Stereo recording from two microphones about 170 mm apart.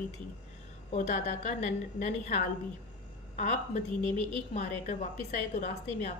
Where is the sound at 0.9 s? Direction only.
40° left (ahead or behind).